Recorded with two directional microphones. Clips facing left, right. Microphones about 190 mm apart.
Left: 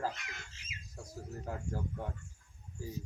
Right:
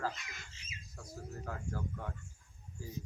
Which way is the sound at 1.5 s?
20° left (ahead or behind).